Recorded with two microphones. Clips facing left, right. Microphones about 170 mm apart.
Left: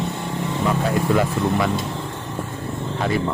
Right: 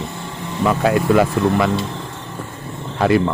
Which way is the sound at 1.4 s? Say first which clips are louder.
Right 5 dB; 90° right.